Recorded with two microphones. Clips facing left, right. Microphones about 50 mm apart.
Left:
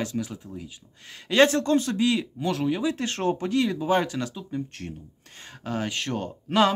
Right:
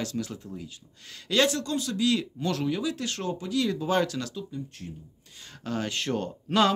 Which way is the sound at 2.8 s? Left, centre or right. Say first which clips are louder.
Left 4 dB; left.